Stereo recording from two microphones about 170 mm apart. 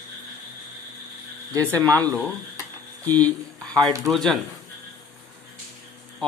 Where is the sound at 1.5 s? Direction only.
20° right (ahead or behind).